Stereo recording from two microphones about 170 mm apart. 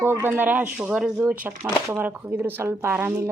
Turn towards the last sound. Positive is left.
turn(degrees=-15)  # may be behind; listen again after turning